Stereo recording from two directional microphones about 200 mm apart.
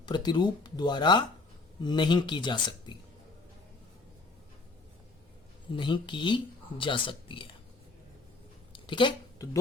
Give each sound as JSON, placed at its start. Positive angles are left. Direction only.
{"t": 0.0, "sound": "speech", "side_deg": 20}
{"t": 5.7, "sound": "speech", "side_deg": 25}
{"t": 8.7, "sound": "a sound", "side_deg": 25}